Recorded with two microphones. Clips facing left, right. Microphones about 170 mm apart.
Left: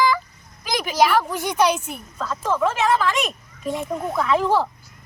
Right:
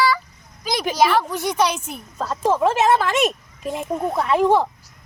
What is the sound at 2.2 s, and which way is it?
Speech, 35° right (ahead or behind).